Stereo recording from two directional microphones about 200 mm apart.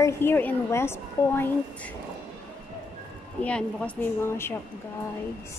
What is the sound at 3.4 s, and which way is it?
A woman's voice, 5° left (ahead or behind).